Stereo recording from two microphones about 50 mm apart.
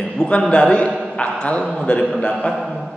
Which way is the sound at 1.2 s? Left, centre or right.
Left.